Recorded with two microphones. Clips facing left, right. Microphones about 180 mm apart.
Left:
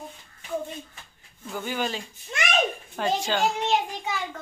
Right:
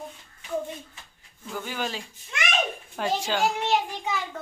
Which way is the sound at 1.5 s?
Centre (ahead or behind).